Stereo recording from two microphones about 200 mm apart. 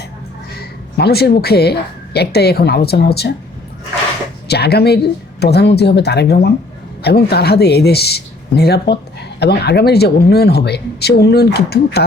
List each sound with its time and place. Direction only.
0.9 s speech: 55° left (ahead or behind)
4.4 s speech: 55° left (ahead or behind)